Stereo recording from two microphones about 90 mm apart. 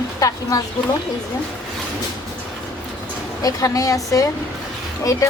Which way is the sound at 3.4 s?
40° left (ahead or behind).